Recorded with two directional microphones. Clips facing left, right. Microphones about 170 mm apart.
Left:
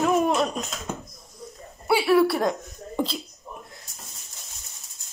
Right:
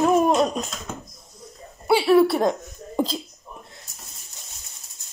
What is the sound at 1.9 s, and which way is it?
Speech, 25° right (ahead or behind).